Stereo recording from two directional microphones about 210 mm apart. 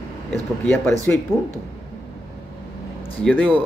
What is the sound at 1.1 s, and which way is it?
Speech, 10° left (ahead or behind).